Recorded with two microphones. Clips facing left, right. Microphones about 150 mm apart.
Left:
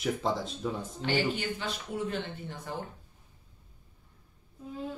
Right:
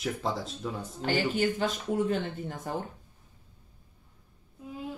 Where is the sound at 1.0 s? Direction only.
45° right (ahead or behind).